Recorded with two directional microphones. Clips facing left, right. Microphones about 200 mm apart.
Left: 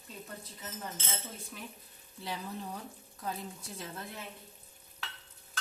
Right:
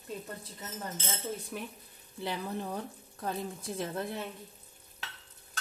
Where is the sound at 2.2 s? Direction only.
60° right (ahead or behind).